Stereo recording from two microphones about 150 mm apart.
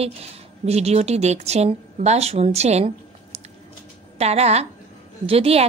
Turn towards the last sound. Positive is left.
turn(degrees=-40)  # may be behind; listen again after turning